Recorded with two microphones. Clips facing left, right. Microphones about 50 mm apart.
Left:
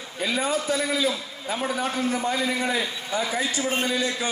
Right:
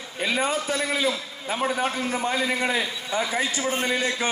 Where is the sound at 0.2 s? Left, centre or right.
Right.